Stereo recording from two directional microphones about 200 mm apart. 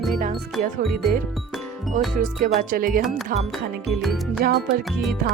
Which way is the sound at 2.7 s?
45° right (ahead or behind).